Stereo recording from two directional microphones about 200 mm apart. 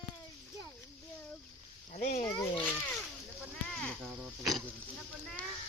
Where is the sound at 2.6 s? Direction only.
5° left (ahead or behind).